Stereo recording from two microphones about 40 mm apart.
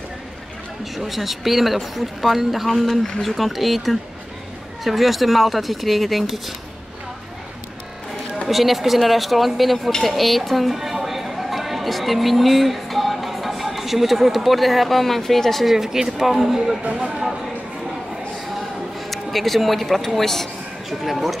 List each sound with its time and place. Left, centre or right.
0.9 s speech: centre
8.5 s speech: centre
15.7 s speech: centre
16.9 s speech: right
19.0 s a man's voice: centre